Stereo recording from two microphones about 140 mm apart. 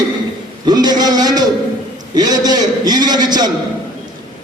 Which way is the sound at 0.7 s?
30° right (ahead or behind).